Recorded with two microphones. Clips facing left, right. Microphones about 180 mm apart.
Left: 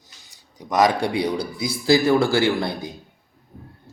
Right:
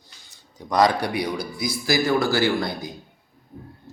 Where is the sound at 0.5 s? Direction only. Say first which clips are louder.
Left 1 dB; 20° left (ahead or behind).